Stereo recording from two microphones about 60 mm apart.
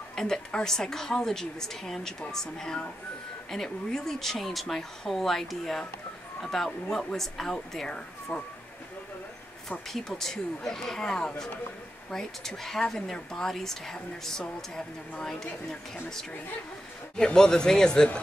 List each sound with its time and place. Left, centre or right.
0.1 s a woman's voice: centre
9.7 s a woman's voice: centre
17.2 s a woman's voice: centre